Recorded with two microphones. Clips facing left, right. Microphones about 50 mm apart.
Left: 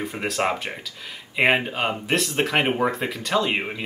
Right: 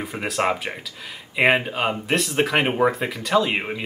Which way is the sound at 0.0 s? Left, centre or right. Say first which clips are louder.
Right 1 dB; centre.